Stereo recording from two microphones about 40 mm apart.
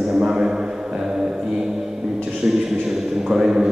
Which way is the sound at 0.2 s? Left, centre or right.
Centre.